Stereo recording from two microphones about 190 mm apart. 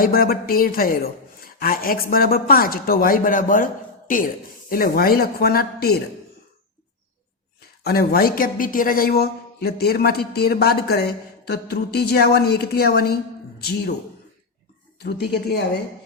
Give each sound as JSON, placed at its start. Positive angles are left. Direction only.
{"t": 0.0, "sound": "speech", "side_deg": 50}
{"t": 7.9, "sound": "speech", "side_deg": 50}
{"t": 14.9, "sound": "speech", "side_deg": 60}